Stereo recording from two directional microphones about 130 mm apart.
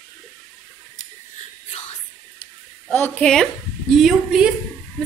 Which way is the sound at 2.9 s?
15° left (ahead or behind).